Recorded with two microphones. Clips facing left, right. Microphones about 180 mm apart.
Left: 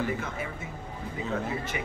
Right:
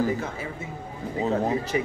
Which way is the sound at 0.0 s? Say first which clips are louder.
Right 5 dB; 35° right (ahead or behind).